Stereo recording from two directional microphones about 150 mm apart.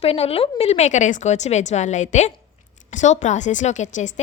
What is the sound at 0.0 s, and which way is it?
A woman's voice, 40° left (ahead or behind).